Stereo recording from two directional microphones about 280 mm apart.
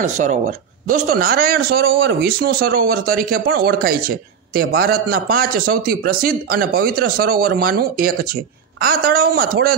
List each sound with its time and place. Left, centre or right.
0.0 s a man's voice: right